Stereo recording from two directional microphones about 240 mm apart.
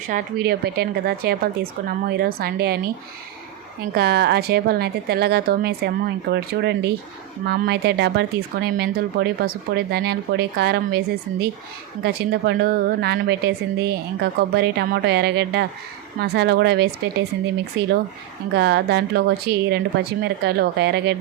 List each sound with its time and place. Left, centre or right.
0.1 s speech: right
3.9 s a woman's voice: right